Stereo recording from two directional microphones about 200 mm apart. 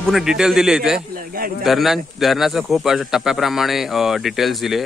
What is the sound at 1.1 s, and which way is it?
Speech, 45° right (ahead or behind).